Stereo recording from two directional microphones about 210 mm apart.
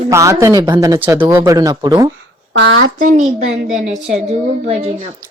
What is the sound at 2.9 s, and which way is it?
Speech, 35° right (ahead or behind).